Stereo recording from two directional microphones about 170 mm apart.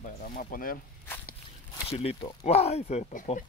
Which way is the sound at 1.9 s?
35° left (ahead or behind).